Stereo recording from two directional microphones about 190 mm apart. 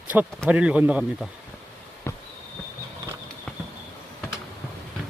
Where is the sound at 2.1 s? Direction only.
10° left (ahead or behind).